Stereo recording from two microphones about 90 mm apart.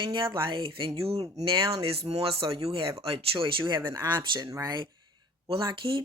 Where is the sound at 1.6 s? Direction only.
40° right (ahead or behind).